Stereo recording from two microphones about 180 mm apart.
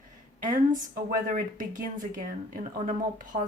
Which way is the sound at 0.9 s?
50° right (ahead or behind).